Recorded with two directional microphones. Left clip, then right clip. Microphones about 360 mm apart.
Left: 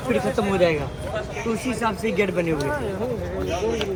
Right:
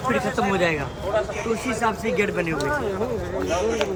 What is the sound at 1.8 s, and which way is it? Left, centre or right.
Speech, centre.